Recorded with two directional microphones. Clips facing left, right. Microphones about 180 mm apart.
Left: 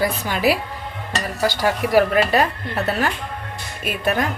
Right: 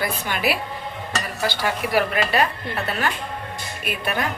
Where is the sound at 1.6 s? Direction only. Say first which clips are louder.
Left 6 dB; 40° left (ahead or behind).